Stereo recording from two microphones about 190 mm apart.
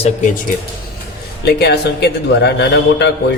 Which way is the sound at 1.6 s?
60° left (ahead or behind).